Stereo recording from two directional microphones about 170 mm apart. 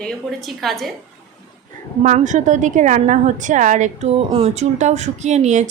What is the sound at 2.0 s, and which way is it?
A woman's voice, 45° right (ahead or behind).